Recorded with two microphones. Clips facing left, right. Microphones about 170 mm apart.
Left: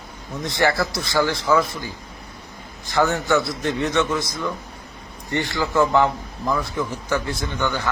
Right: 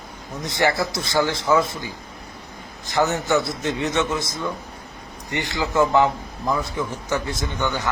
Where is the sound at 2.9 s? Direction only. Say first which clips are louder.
Left 1 dB; 20° right (ahead or behind).